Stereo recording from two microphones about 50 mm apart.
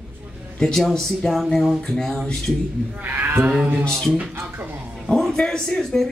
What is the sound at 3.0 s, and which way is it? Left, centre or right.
Speech, right.